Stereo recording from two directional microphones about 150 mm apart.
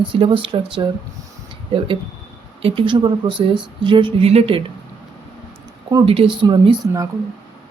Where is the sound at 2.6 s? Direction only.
35° right (ahead or behind).